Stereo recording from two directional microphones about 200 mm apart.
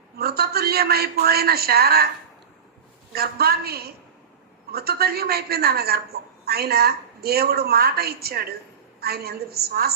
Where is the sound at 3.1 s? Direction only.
50° right (ahead or behind).